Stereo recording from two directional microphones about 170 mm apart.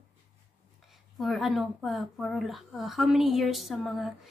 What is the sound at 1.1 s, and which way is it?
Speech, centre (ahead or behind).